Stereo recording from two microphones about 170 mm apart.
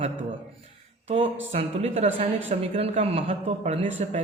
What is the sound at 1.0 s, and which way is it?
Speech, 35° right (ahead or behind).